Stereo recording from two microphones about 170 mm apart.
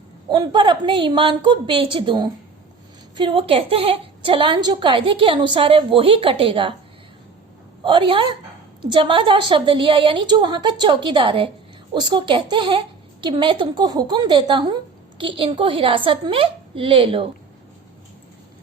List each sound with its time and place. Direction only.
0.3 s a woman's voice: 25° right (ahead or behind)
7.9 s a woman's voice: 30° right (ahead or behind)